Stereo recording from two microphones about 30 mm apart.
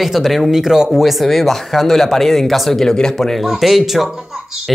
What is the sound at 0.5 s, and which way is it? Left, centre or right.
Speech, centre.